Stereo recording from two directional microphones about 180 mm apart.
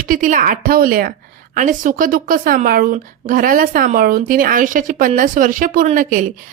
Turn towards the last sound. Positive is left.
turn(degrees=-45)  # may be behind; listen again after turning